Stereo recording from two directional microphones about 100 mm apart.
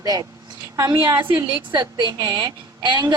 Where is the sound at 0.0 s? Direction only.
40° right (ahead or behind).